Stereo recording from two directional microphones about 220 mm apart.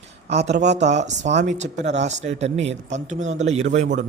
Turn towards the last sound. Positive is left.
turn(degrees=-30)  # may be behind; listen again after turning